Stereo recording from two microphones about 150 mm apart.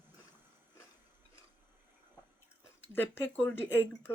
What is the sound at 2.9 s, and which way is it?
Speech, 15° left (ahead or behind).